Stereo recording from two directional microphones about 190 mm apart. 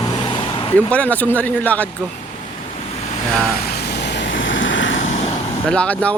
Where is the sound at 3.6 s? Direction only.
60° left (ahead or behind); by 5.0 s 80° left.